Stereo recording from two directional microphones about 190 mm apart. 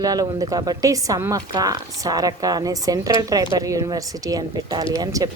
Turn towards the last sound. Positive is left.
turn(degrees=-20)  # may be behind; listen again after turning